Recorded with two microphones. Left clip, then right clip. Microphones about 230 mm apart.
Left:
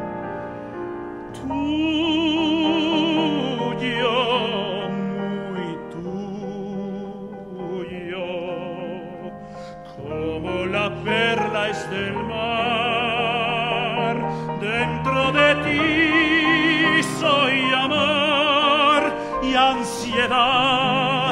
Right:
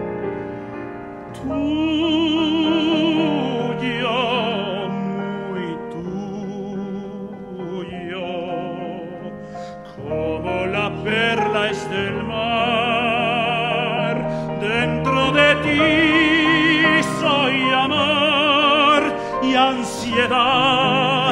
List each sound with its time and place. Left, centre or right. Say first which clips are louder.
1.5 s music: right 2 dB; centre
10.1 s music: right 4 dB; left; by 19.7 s centre
20.1 s music: right 2 dB; centre